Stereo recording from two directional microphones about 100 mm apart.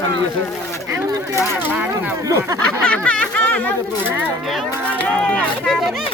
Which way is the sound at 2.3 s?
35° right (ahead or behind).